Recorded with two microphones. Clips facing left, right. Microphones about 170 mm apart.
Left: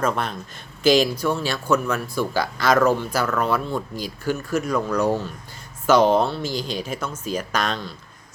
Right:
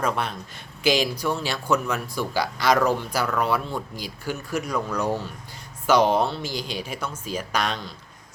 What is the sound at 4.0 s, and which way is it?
Speech, 45° left (ahead or behind).